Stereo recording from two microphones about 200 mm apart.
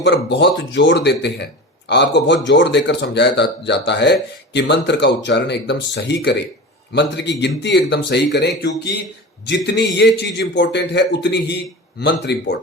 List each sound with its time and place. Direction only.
0.0 s speech: 60° left (ahead or behind)